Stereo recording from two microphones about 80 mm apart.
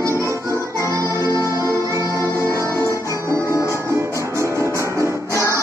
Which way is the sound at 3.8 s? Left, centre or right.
Right.